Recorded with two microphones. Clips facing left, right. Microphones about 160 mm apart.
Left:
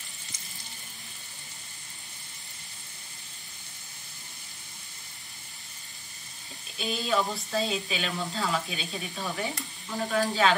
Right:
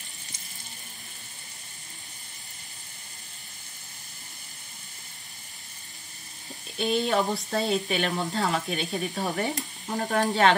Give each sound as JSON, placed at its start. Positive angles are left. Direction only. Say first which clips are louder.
{"t": 6.8, "sound": "speech", "louder": "right 4 dB", "side_deg": -60}